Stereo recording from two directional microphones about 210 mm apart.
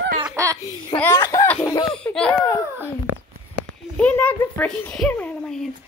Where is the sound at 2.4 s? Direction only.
15° left (ahead or behind).